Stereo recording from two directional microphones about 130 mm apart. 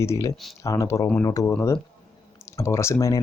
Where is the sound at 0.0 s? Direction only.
20° left (ahead or behind).